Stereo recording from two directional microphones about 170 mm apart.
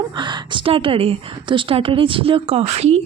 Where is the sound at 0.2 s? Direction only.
25° right (ahead or behind).